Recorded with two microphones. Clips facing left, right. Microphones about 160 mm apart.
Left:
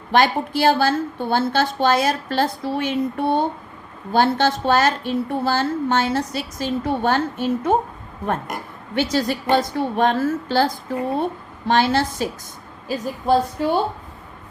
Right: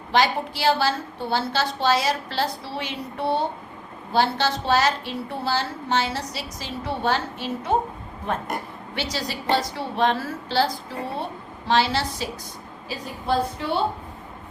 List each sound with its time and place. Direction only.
0.1 s a woman's voice: 50° left (ahead or behind)
9.0 s a woman's voice: 50° left (ahead or behind)